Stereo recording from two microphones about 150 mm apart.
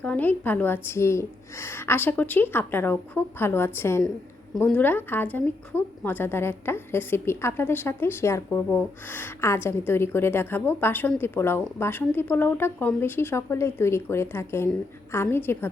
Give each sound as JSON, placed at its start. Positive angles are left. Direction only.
{"t": 0.0, "sound": "a woman's voice", "side_deg": 10}